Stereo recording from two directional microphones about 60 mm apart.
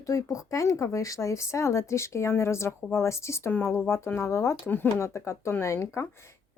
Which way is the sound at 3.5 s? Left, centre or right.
Left.